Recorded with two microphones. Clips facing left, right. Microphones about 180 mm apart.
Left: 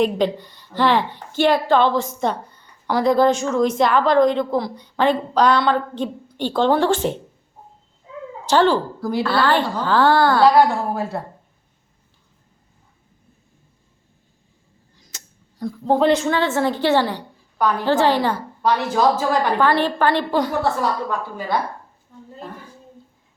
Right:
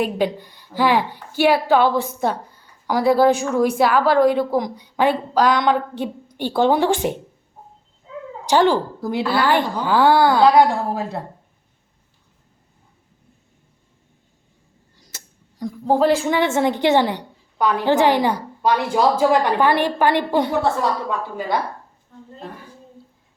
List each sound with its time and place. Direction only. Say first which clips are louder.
0.0 s a woman's voice: left 2 dB; 10° right (ahead or behind)
8.4 s a woman's voice: even; 15° right (ahead or behind)
15.5 s a woman's voice: even; 10° right (ahead or behind)
16.2 s a woman's voice: right 1 dB; 15° right (ahead or behind)